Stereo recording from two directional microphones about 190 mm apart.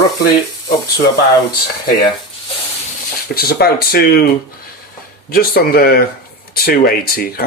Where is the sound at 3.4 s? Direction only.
55° left (ahead or behind).